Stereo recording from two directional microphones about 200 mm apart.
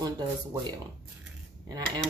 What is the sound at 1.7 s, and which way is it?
Speech, 20° right (ahead or behind).